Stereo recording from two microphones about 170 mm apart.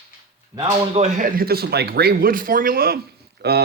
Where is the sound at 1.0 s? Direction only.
60° right (ahead or behind).